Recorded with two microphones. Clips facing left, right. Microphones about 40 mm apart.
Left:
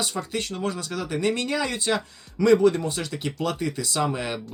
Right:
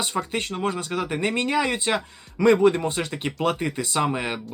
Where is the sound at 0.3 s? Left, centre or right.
Right.